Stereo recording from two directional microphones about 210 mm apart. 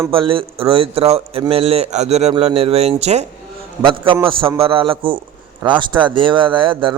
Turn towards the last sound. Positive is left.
turn(degrees=-25)  # may be behind; listen again after turning